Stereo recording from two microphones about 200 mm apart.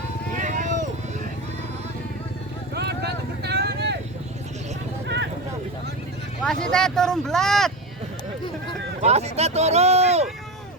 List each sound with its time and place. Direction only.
0.3 s vehicle: 40° right (ahead or behind)
2.7 s vehicle: 55° right (ahead or behind)
5.0 s a sound: 60° right (ahead or behind)
6.4 s speech: 5° left (ahead or behind)
9.0 s speech: 35° right (ahead or behind)